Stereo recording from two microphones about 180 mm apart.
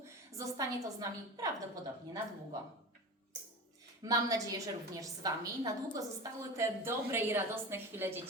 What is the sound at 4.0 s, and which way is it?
A woman's voice, 20° right (ahead or behind).